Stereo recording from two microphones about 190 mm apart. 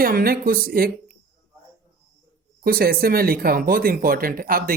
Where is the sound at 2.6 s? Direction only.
50° right (ahead or behind).